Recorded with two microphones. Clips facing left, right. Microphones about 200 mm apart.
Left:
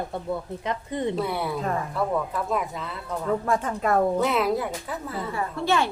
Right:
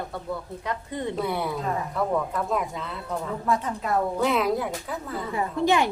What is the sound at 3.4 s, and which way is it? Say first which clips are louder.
Speech: left 2 dB; 50° left (ahead or behind).